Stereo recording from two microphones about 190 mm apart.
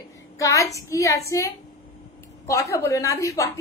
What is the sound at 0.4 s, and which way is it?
Speech, 15° left (ahead or behind).